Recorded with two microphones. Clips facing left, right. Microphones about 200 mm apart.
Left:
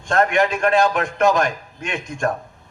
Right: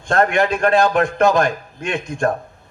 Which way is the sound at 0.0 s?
35° right (ahead or behind).